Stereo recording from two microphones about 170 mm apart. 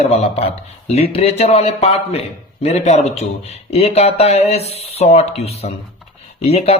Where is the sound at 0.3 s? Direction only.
35° left (ahead or behind).